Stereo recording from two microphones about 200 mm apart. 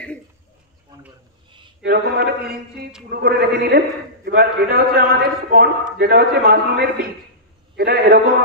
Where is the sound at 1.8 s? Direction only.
60° right (ahead or behind).